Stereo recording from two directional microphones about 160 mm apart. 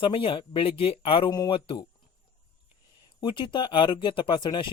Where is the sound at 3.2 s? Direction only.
30° left (ahead or behind).